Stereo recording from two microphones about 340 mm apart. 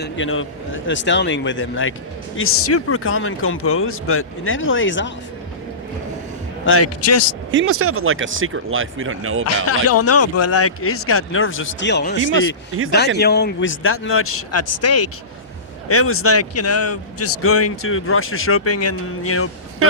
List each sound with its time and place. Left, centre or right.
0.0 s a man's voice: left
6.7 s a man's voice: left
7.5 s speech: right
9.6 s a man's voice: left
12.2 s speech: right
13.1 s a man's voice: left